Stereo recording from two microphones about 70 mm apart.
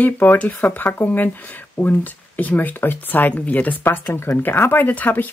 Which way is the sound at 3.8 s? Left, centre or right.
Left.